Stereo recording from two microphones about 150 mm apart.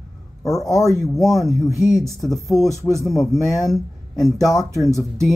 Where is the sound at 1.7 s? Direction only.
25° left (ahead or behind).